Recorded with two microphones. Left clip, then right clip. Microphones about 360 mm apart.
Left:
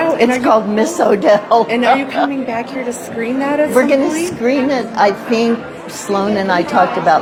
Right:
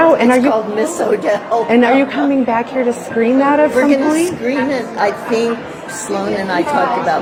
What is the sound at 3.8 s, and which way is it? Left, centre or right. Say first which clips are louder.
A man's voice: right 1 dB; left.